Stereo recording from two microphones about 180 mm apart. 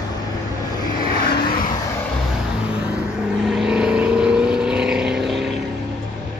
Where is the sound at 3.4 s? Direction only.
5° right (ahead or behind).